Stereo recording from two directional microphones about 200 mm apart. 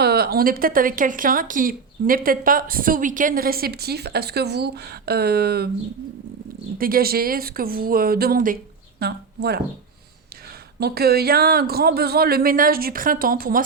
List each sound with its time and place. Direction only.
0.0 s speech: 50° right (ahead or behind)
6.7 s speech: 45° right (ahead or behind)
10.8 s speech: 50° right (ahead or behind)